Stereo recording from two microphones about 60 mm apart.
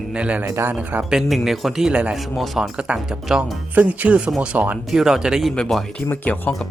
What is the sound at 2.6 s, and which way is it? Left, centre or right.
Speech, centre.